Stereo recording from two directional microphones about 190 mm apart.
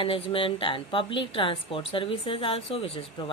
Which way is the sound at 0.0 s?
25° left (ahead or behind).